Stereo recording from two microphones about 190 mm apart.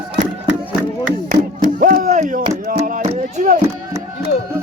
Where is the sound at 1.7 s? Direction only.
45° right (ahead or behind).